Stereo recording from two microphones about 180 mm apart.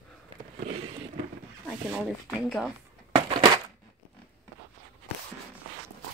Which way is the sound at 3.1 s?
30° right (ahead or behind).